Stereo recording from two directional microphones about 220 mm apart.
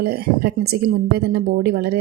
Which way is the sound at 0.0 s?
45° right (ahead or behind).